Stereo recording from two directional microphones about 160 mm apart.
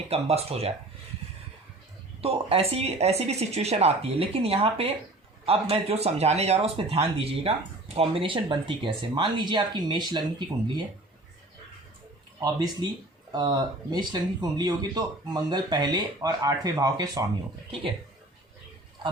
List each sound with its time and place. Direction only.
0.1 s speech: 40° right (ahead or behind)
2.2 s speech: 40° right (ahead or behind)
12.4 s speech: 25° right (ahead or behind)